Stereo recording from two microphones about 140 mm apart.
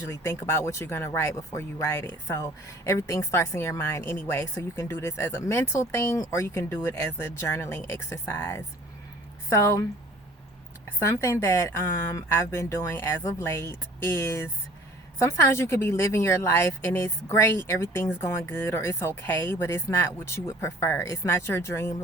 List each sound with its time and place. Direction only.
0.1 s speech: 20° left (ahead or behind)
11.1 s speech: 20° left (ahead or behind)